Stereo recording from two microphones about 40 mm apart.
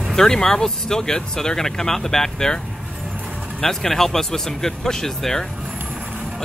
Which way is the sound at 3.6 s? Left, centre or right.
Centre.